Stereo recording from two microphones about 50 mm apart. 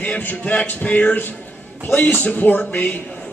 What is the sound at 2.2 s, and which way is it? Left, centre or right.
Speech, left.